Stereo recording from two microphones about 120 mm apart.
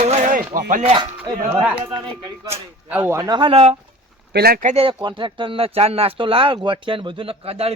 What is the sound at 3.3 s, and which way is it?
Speech, 50° right (ahead or behind).